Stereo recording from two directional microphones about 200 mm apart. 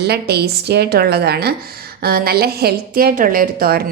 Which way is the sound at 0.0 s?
55° right (ahead or behind).